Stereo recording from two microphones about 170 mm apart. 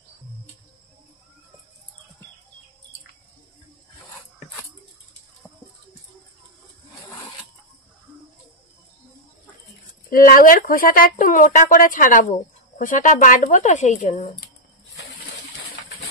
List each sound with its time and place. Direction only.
10.0 s speech: 55° left (ahead or behind)